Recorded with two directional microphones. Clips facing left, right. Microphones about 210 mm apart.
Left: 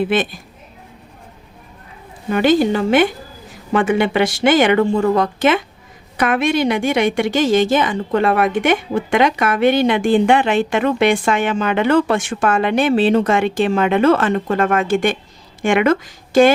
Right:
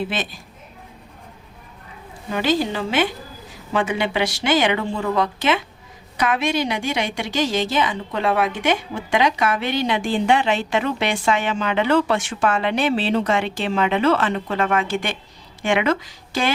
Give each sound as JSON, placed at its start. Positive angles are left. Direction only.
{"t": 0.0, "sound": "a woman's voice", "side_deg": 55}
{"t": 2.3, "sound": "a woman's voice", "side_deg": 55}